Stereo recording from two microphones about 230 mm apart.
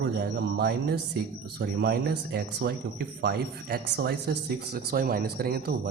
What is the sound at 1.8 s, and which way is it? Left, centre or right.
A man's voice, right.